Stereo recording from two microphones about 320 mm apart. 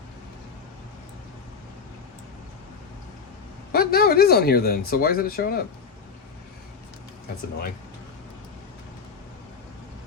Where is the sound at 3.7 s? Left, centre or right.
Left.